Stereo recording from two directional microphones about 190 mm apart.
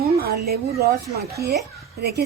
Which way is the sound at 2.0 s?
60° right (ahead or behind).